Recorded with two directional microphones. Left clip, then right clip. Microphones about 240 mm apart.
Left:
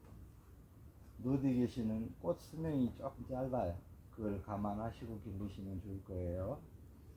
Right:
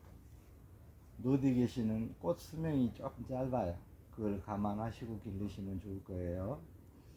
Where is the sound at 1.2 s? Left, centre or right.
Right.